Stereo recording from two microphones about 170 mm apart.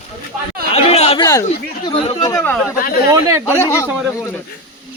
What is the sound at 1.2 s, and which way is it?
Speech, 20° left (ahead or behind).